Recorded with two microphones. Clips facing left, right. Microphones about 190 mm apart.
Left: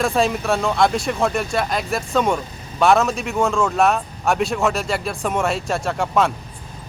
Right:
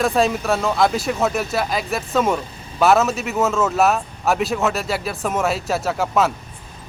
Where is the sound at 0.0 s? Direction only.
Centre (ahead or behind).